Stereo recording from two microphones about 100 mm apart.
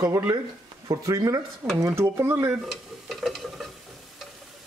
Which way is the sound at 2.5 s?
Centre (ahead or behind).